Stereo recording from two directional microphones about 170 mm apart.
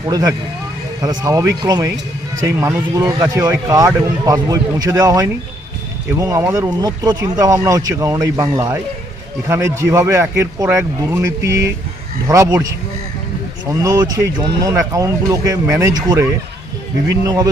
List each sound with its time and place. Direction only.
0.1 s speech: 20° right (ahead or behind)
13.8 s speech: 20° right (ahead or behind)